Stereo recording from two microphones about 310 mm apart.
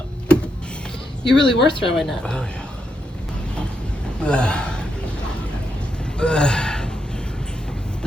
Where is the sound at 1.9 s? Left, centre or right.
Centre.